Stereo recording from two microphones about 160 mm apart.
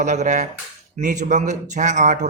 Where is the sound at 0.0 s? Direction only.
50° right (ahead or behind).